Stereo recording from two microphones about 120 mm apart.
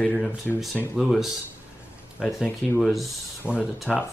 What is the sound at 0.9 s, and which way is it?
Speech, 5° right (ahead or behind).